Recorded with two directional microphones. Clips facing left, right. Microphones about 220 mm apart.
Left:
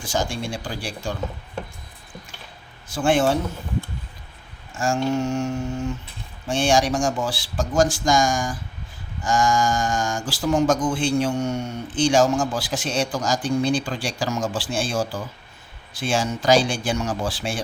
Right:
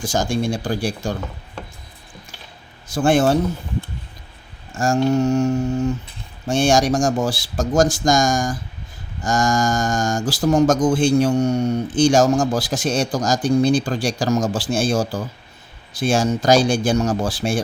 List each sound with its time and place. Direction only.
0.0 s speech: 45° right (ahead or behind)
2.9 s speech: 40° right (ahead or behind)
4.7 s speech: 40° right (ahead or behind)